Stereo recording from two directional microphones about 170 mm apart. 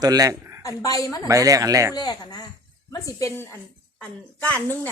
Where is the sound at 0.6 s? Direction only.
20° left (ahead or behind).